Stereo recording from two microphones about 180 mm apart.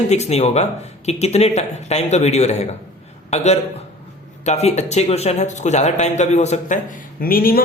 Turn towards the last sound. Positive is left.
turn(degrees=55)  # may be behind; listen again after turning